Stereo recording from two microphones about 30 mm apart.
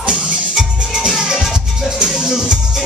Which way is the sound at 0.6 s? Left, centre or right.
Centre.